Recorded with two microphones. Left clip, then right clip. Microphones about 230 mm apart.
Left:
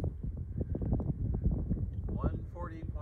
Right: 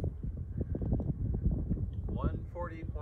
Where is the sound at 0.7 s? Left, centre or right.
Right.